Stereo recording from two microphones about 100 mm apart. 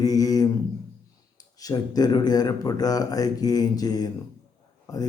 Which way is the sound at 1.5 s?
40° left (ahead or behind).